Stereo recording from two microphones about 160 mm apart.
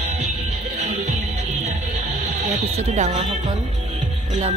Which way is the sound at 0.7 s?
50° right (ahead or behind).